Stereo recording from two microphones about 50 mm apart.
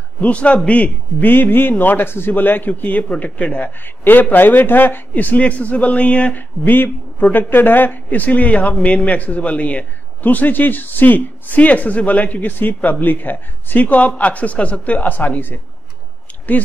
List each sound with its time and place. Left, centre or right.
0.2 s speech: left
1.3 s speech: left
3.8 s speech: left
6.3 s speech: left